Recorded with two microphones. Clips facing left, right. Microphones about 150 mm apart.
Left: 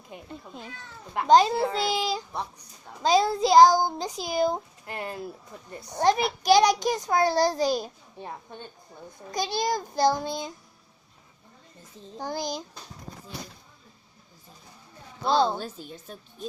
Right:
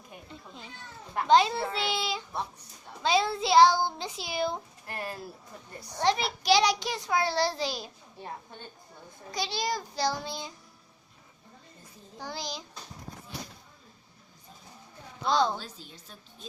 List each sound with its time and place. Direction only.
0.3 s speech: 50° left (ahead or behind)
4.9 s speech: 20° left (ahead or behind)
6.0 s a child's voice: 45° left (ahead or behind)
9.3 s a child's voice: 50° left (ahead or behind)
12.2 s a child's voice: 50° left (ahead or behind)
15.3 s speech: 30° left (ahead or behind)
15.5 s a child's voice: 50° left (ahead or behind)